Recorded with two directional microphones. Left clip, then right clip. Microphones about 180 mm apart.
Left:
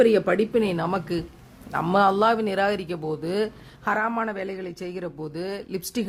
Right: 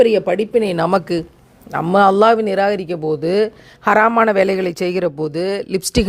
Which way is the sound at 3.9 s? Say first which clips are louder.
Right 17 dB; 55° right (ahead or behind).